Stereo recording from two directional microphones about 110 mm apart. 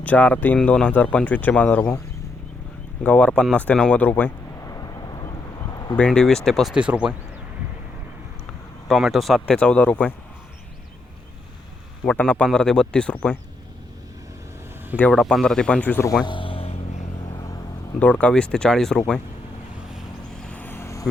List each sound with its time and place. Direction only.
0.0 s speech: 15° left (ahead or behind)
3.0 s speech: 10° left (ahead or behind)
4.6 s a sound: 30° left (ahead or behind)
6.0 s speech: 5° left (ahead or behind)
8.9 s speech: centre (ahead or behind)
9.6 s speech: 10° left (ahead or behind)
12.0 s speech: 10° left (ahead or behind)
15.1 s speech: centre (ahead or behind)
16.2 s a sound: 50° left (ahead or behind); by 17.0 s 65° left (ahead or behind)
17.2 s vehicle: 35° left (ahead or behind)
18.0 s speech: 15° left (ahead or behind)
20.4 s vehicle: 15° left (ahead or behind)